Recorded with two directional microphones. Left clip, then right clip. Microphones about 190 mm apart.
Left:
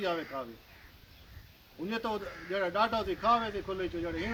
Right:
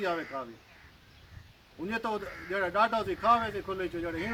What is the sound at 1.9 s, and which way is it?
A man's voice, 20° left (ahead or behind).